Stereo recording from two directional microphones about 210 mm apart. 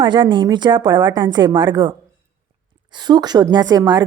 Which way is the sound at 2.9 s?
20° right (ahead or behind).